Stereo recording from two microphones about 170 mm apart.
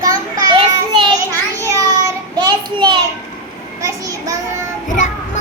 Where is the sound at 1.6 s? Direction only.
20° right (ahead or behind).